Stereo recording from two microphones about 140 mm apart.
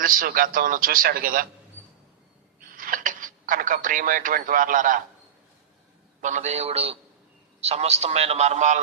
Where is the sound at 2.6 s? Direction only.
85° right.